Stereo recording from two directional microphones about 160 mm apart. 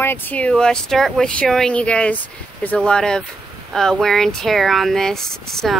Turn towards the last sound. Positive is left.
turn(degrees=0)  # may be behind; listen again after turning